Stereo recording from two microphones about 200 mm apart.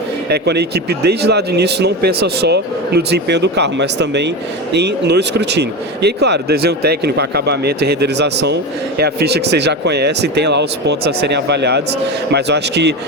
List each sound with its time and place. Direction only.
0.3 s speech: 55° right (ahead or behind)